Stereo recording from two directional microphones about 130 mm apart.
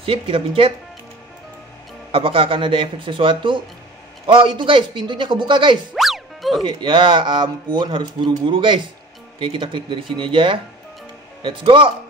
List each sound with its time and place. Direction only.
0.0 s speech: 45° right (ahead or behind)
2.1 s speech: 45° right (ahead or behind)
5.9 s music: centre (ahead or behind)
6.6 s speech: 40° right (ahead or behind)